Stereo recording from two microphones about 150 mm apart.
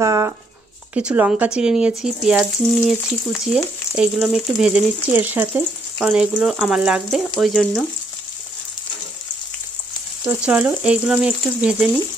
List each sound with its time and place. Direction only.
0.0 s a sound: 20° right (ahead or behind)
0.9 s speech: 10° right (ahead or behind)
5.1 s frying: 10° right (ahead or behind)
5.9 s speech: 5° right (ahead or behind)
10.2 s frying: 10° right (ahead or behind)